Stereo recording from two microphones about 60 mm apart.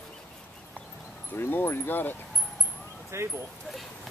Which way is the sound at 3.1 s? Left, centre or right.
Right.